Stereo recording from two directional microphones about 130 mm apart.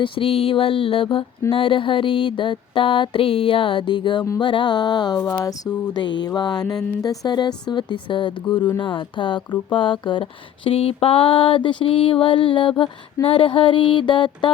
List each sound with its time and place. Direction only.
0.0 s mantra: 45° left (ahead or behind)